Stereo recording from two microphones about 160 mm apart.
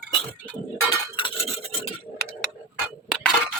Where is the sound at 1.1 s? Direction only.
35° left (ahead or behind).